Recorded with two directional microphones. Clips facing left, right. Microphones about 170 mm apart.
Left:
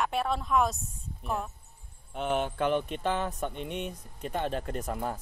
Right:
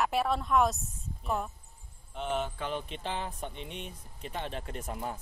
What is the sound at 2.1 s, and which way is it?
A man's voice, 60° left (ahead or behind).